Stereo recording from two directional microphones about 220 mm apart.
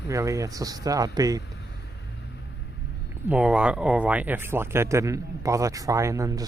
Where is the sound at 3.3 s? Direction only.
5° right (ahead or behind).